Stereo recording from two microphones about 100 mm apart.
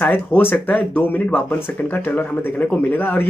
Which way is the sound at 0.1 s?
20° left (ahead or behind).